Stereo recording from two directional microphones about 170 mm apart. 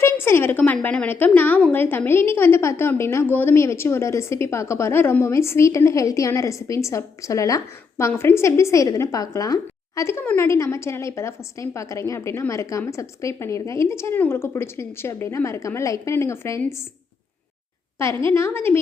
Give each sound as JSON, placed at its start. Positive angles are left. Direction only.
{"t": 0.0, "sound": "a woman's voice", "side_deg": 15}
{"t": 18.3, "sound": "a woman's voice", "side_deg": 15}